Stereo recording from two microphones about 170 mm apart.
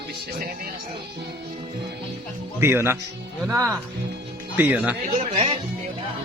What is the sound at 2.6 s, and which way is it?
Speech, 15° right (ahead or behind).